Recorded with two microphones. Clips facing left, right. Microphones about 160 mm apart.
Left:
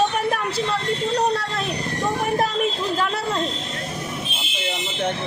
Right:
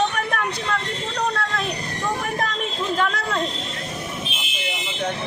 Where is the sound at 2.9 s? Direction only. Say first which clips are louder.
Even; 30° left (ahead or behind).